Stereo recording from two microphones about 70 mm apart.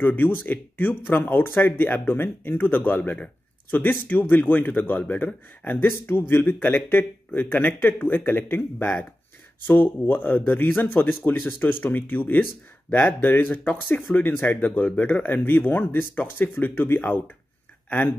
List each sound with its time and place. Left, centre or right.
0.0 s speech: left